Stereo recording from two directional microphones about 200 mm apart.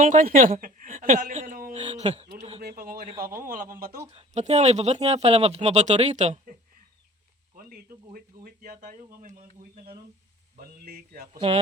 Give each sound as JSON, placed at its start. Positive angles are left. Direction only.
{"t": 0.0, "sound": "a woman's voice", "side_deg": -40}
{"t": 2.6, "sound": "speech", "side_deg": -50}
{"t": 4.1, "sound": "a woman's voice", "side_deg": -30}
{"t": 11.3, "sound": "speech", "side_deg": -30}